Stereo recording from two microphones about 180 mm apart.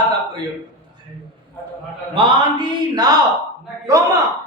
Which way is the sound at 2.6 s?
20° right (ahead or behind).